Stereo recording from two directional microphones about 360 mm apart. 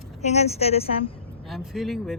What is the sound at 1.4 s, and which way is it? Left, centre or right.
Speech, centre.